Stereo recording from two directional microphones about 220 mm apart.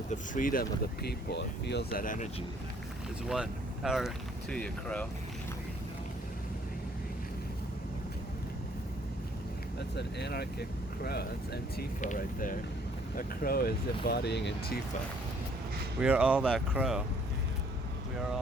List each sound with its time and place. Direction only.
0.1 s speech: 40° left (ahead or behind)
3.2 s speech: 5° right (ahead or behind)
9.9 s speech: 50° left (ahead or behind)
16.0 s speech: 5° right (ahead or behind)